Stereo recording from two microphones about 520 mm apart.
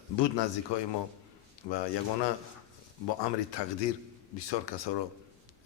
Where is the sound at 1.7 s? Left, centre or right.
Left.